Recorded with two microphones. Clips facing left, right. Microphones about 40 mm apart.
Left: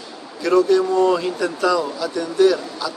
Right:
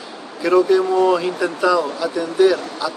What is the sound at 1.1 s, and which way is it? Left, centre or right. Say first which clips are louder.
Speech: right 2 dB; centre.